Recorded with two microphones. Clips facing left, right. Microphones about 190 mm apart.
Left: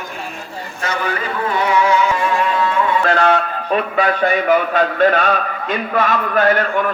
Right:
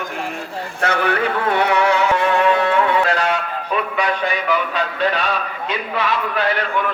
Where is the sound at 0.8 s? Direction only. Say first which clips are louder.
Right 3 dB; 65° right (ahead or behind).